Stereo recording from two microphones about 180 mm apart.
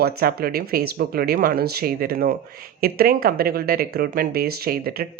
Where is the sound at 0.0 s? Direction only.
55° right (ahead or behind).